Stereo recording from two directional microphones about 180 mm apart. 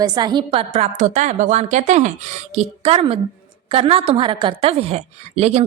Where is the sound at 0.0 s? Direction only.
25° right (ahead or behind).